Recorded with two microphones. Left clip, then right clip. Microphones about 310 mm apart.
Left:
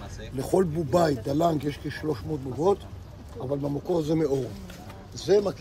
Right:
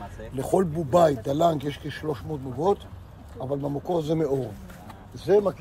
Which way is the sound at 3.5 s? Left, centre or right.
Right.